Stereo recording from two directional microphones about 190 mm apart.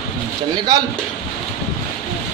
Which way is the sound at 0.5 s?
20° right (ahead or behind).